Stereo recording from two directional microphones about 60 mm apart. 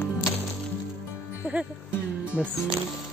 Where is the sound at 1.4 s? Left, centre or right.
Right.